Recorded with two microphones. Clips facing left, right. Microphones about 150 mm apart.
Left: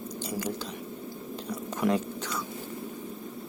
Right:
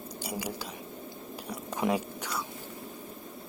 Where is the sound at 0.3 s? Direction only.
10° right (ahead or behind).